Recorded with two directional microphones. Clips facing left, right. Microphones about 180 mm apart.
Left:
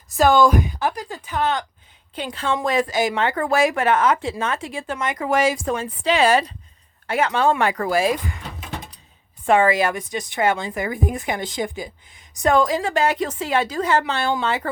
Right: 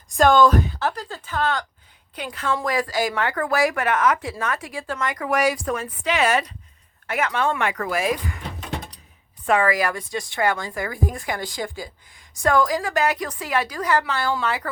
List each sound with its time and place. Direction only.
0.1 s a woman's voice: 5° left (ahead or behind); by 8.4 s 25° left (ahead or behind)
9.5 s a woman's voice: 25° left (ahead or behind)